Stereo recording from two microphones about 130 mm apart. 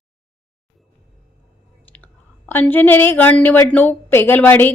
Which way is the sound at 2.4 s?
15° left (ahead or behind).